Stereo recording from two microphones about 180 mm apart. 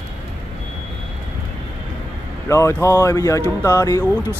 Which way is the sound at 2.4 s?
15° left (ahead or behind).